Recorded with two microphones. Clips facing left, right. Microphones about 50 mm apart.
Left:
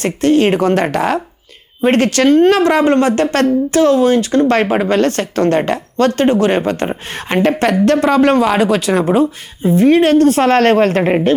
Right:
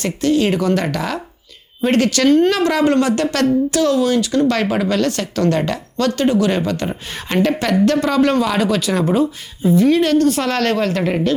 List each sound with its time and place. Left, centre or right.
0.0 s speech: left